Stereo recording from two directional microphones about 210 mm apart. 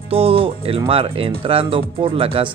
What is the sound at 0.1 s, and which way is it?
Speech, 25° right (ahead or behind).